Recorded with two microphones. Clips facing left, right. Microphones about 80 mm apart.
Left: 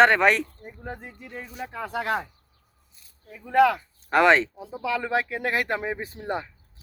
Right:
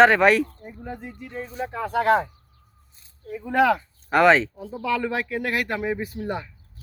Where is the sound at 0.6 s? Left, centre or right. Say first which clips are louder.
Right 2 dB; left.